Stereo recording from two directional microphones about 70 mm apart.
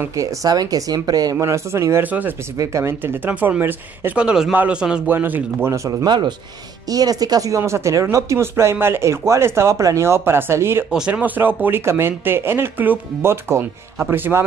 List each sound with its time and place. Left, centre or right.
0.1 s speech: right
1.3 s speech: right
2.0 s speech: right
2.5 s speech: right
4.2 s a man's voice: centre
5.0 s speech: right
5.7 s speech: right
6.0 s speech: right
6.9 s speech: right
10.9 s a man's voice: centre
11.1 s speech: right
13.2 s speech: right